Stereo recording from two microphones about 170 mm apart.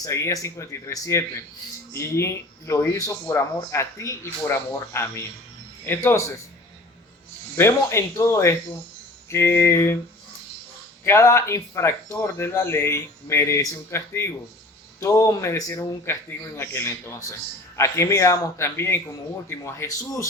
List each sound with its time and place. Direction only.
0.0 s speech: 20° left (ahead or behind)
7.5 s speech: 15° left (ahead or behind)
11.0 s speech: 15° left (ahead or behind)